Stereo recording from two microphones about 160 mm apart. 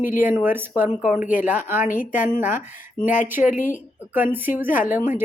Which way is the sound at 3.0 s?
55° left (ahead or behind).